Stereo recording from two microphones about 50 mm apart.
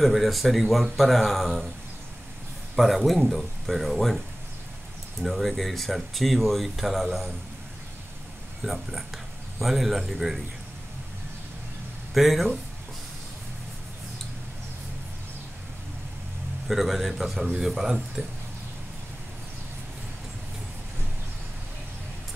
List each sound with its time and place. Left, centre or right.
0.0 s speech: centre
2.7 s speech: centre
5.2 s speech: centre
8.6 s speech: centre
12.1 s speech: centre
16.6 s speech: centre
18.2 s speech: right